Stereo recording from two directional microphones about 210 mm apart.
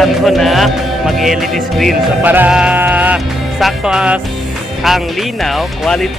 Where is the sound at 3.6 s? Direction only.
5° right (ahead or behind).